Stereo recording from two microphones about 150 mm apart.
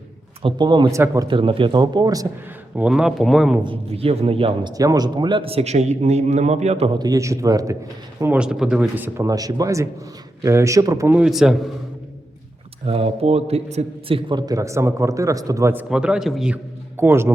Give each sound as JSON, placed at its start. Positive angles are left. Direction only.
{"t": 0.4, "sound": "a man's voice", "side_deg": -30}
{"t": 1.3, "sound": "a man's voice", "side_deg": -35}
{"t": 2.7, "sound": "speech", "side_deg": -5}
{"t": 3.6, "sound": "a man's voice", "side_deg": -35}
{"t": 4.7, "sound": "a man's voice", "side_deg": -25}
{"t": 8.2, "sound": "a man's voice", "side_deg": -10}
{"t": 9.1, "sound": "a man's voice", "side_deg": -25}
{"t": 11.1, "sound": "speech", "side_deg": -5}
{"t": 12.9, "sound": "a man's voice", "side_deg": -40}
{"t": 17.0, "sound": "a man's voice", "side_deg": -15}